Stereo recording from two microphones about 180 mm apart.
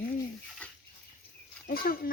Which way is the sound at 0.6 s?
5° left (ahead or behind).